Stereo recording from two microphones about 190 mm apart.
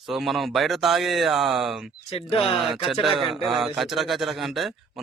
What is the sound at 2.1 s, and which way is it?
Speech, 30° left (ahead or behind).